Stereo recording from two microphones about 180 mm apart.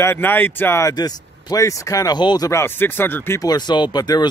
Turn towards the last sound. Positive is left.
turn(degrees=20)  # may be behind; listen again after turning